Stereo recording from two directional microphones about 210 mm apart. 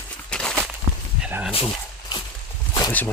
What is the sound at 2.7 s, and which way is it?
Zipper, 20° left (ahead or behind).